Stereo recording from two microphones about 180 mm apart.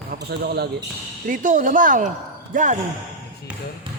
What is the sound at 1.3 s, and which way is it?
Speech, 45° right (ahead or behind).